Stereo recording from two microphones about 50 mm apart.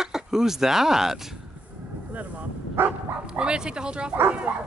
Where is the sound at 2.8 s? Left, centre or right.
Right.